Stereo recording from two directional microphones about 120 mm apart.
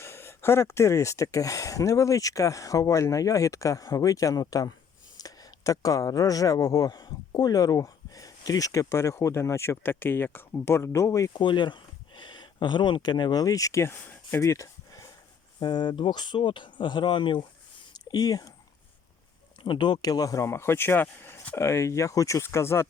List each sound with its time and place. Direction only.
0.0 s speech: 20° left (ahead or behind)
11.3 s speech: 40° left (ahead or behind)
19.6 s speech: 40° left (ahead or behind); by 22.9 s 20° left (ahead or behind)